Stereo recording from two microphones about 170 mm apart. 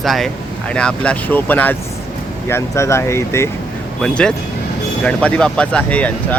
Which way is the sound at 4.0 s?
5° left (ahead or behind).